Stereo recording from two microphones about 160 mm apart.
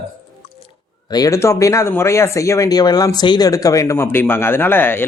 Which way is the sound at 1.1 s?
20° left (ahead or behind).